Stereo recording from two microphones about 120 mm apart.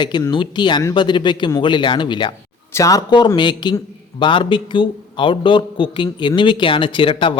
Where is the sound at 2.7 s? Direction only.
30° left (ahead or behind).